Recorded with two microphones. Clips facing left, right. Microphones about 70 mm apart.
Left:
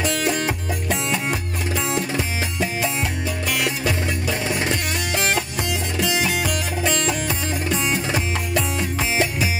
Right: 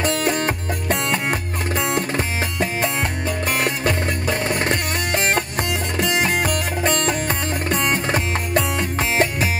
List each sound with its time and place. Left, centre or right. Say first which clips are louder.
0.0 s music: right 2 dB; right